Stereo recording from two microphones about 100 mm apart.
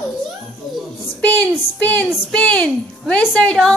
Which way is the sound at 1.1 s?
15° left (ahead or behind).